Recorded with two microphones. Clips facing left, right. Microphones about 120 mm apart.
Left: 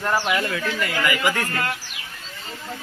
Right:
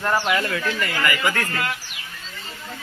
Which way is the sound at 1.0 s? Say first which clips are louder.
Left 2 dB; 20° left (ahead or behind).